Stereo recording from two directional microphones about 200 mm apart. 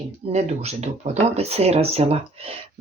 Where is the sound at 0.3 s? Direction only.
35° right (ahead or behind).